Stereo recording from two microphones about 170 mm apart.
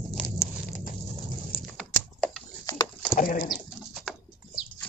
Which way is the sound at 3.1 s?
55° left (ahead or behind).